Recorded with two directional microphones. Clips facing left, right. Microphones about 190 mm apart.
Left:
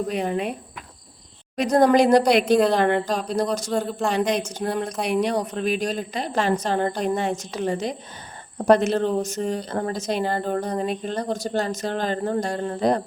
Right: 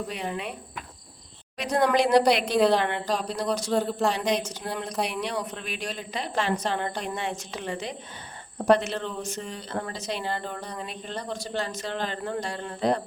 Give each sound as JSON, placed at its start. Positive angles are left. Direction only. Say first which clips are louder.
{"t": 0.1, "sound": "a woman's voice", "louder": "left 8 dB", "side_deg": 45}
{"t": 1.5, "sound": "a woman's voice", "louder": "left 6 dB", "side_deg": 40}
{"t": 3.7, "sound": "speech", "louder": "even", "side_deg": 0}
{"t": 4.1, "sound": "a woman's voice", "louder": "left 4 dB", "side_deg": 50}